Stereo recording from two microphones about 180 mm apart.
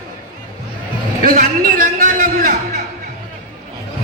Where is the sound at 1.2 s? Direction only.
50° right (ahead or behind).